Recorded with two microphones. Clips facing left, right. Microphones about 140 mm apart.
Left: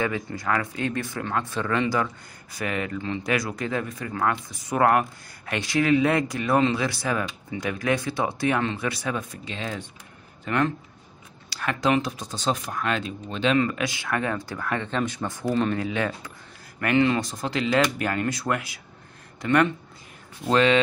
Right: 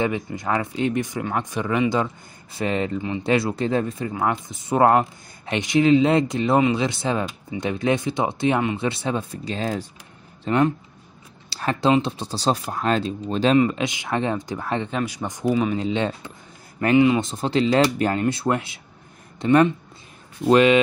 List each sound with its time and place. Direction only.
0.0 s speech: 20° right (ahead or behind)
10.4 s speech: 20° right (ahead or behind); by 13.6 s 35° right (ahead or behind)
13.6 s speech: 20° right (ahead or behind)
14.9 s speech: 10° right (ahead or behind)
15.5 s speech: 5° right (ahead or behind)
15.8 s speech: 25° right (ahead or behind)
16.9 s speech: 15° right (ahead or behind)
20.4 s speech: 15° right (ahead or behind)